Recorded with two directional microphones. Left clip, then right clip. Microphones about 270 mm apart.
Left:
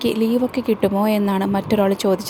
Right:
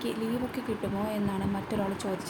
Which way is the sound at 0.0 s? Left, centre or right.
Left.